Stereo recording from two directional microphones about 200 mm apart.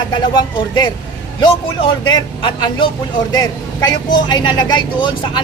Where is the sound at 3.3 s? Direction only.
20° left (ahead or behind).